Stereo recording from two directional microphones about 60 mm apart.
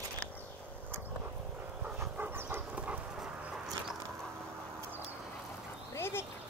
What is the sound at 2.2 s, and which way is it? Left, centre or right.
Dog, right.